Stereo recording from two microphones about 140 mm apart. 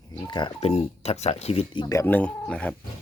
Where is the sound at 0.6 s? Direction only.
50° left (ahead or behind).